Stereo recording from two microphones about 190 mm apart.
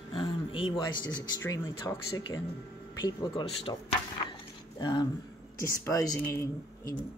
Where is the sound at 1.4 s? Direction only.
15° left (ahead or behind).